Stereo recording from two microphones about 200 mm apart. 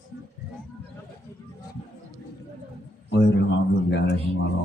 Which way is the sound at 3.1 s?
60° left (ahead or behind).